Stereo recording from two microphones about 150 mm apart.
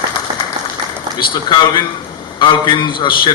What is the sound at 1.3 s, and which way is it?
A man's voice, 30° left (ahead or behind).